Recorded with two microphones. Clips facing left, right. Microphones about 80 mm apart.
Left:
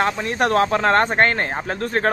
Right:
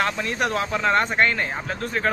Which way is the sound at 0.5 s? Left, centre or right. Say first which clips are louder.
Left 7 dB; left.